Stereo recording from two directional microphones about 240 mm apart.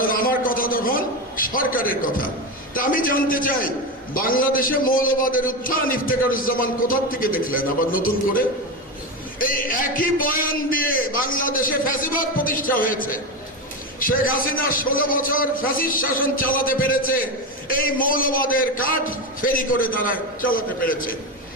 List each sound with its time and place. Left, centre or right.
0.0 s a sound: left
1.4 s a man's voice: left
9.4 s a man's voice: left